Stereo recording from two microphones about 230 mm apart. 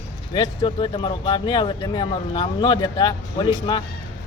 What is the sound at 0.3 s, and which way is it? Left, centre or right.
Speech, centre.